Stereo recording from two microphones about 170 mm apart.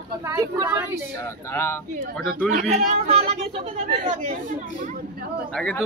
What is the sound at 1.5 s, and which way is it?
Speech, 15° left (ahead or behind).